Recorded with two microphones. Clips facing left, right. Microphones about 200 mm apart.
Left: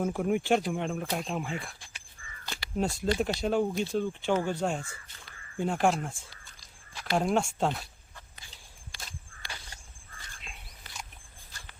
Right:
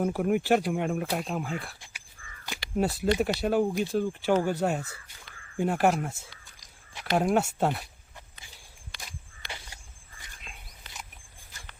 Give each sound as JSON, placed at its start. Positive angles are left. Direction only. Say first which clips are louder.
{"t": 0.0, "sound": "speech", "louder": "right 2 dB", "side_deg": -5}
{"t": 2.7, "sound": "speech", "louder": "right 3 dB", "side_deg": -5}
{"t": 9.0, "sound": "walk", "louder": "right 1 dB", "side_deg": -15}